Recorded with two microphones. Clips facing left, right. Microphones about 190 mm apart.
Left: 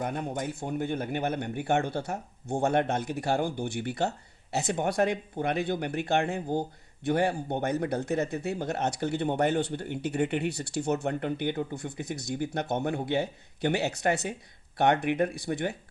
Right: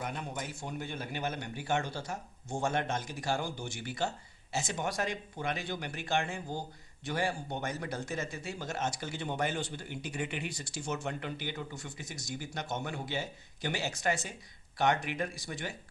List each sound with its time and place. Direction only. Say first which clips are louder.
0.0 s speech: left 7 dB; 50° left (ahead or behind)